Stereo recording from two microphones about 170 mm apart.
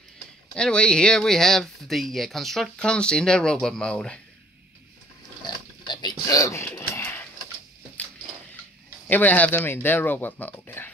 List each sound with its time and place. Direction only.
0.6 s speech: 5° left (ahead or behind)
5.5 s a sound: 25° left (ahead or behind)
9.0 s speech: 10° left (ahead or behind)